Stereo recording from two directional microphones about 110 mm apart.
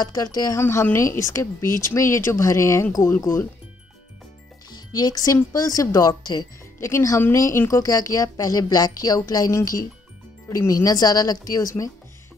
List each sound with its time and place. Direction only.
0.0 s speech: 35° left (ahead or behind)
0.6 s speech: 20° left (ahead or behind)
4.6 s speech: 40° left (ahead or behind)